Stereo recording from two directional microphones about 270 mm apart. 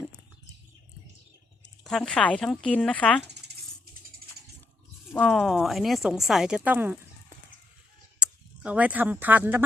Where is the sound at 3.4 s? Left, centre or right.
Right.